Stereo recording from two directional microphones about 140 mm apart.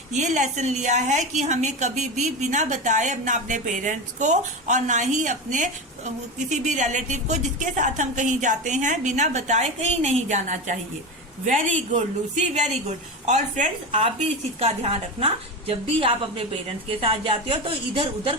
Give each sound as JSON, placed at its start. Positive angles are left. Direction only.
{"t": 0.1, "sound": "a woman's voice", "side_deg": -55}
{"t": 13.2, "sound": "a woman's voice", "side_deg": -55}
{"t": 14.6, "sound": "a woman's voice", "side_deg": -45}